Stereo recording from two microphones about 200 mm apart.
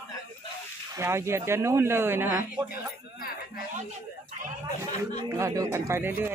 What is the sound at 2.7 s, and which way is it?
Music, 45° left (ahead or behind).